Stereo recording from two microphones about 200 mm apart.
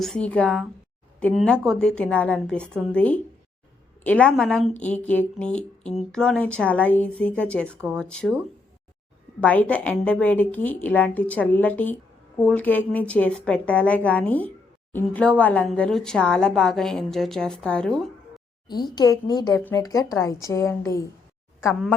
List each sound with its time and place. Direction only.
0.0 s a woman's voice: 5° left (ahead or behind)
9.4 s a woman's voice: 5° left (ahead or behind)
18.7 s a woman's voice: 20° left (ahead or behind)